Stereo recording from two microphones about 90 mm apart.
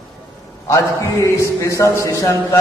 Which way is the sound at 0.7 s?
35° left (ahead or behind).